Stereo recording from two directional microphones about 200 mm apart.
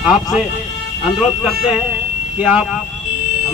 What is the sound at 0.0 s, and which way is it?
Speech, centre (ahead or behind).